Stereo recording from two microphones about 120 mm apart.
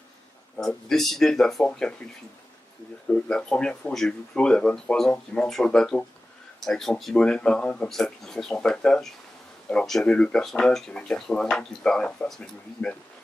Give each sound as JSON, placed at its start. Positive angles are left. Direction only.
{"t": 0.6, "sound": "speech", "side_deg": 5}
{"t": 3.1, "sound": "speech", "side_deg": 5}